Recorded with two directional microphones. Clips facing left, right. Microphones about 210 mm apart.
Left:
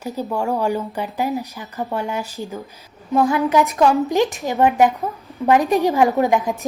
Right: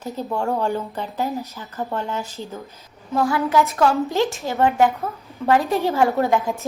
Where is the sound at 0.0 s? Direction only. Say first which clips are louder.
Left 2 dB; 10° left (ahead or behind).